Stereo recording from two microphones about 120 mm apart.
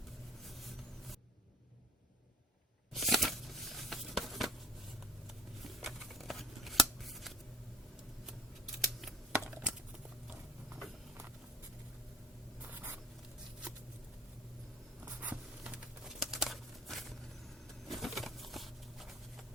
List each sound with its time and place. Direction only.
2.9 s shuffling cards: centre (ahead or behind)
5.6 s shuffling cards: centre (ahead or behind)
9.3 s computer keyboard: 10° right (ahead or behind)
12.6 s writing: 15° right (ahead or behind)
15.0 s patter: 10° right (ahead or behind)
17.8 s bird: centre (ahead or behind)